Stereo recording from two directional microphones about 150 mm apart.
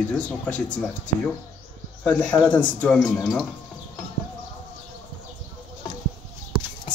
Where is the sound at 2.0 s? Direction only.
10° left (ahead or behind).